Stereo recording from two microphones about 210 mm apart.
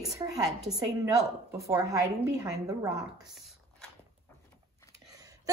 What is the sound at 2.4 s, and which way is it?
Speech, 15° right (ahead or behind).